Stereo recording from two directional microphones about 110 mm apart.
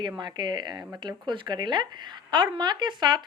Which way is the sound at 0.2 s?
40° right (ahead or behind).